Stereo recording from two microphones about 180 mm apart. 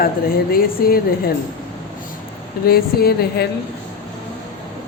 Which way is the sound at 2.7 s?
60° left (ahead or behind).